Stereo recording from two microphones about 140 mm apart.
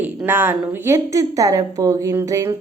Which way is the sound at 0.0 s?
15° right (ahead or behind).